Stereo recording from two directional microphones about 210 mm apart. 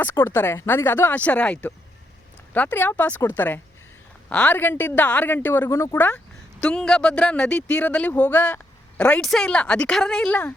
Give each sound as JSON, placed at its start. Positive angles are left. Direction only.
{"t": 0.0, "sound": "a woman's voice", "side_deg": 10}